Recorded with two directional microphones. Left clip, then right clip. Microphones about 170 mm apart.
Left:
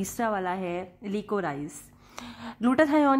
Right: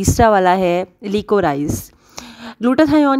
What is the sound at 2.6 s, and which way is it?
Speech, 30° right (ahead or behind).